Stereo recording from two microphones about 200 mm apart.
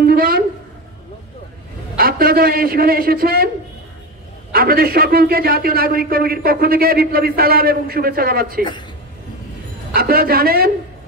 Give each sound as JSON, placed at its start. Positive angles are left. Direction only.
{"t": 0.0, "sound": "a sound", "side_deg": -45}
{"t": 2.0, "sound": "a man's voice", "side_deg": -45}
{"t": 4.5, "sound": "a man's voice", "side_deg": -50}
{"t": 9.9, "sound": "a man's voice", "side_deg": -50}